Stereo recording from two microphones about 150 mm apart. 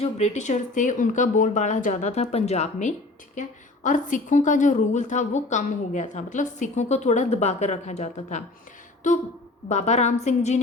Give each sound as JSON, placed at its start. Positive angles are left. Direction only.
{"t": 0.0, "sound": "a woman's voice", "side_deg": 50}